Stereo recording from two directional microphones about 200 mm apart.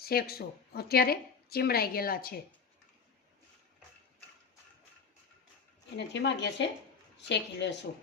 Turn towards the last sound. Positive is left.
turn(degrees=60)  # may be behind; listen again after turning